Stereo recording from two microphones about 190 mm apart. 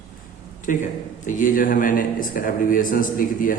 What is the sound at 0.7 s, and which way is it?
A man's voice, 45° left (ahead or behind).